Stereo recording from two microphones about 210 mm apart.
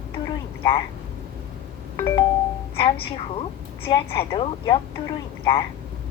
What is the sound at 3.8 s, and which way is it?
Speech, 25° left (ahead or behind).